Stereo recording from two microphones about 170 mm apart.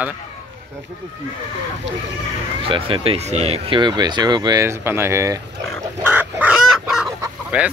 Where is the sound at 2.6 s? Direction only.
30° right (ahead or behind).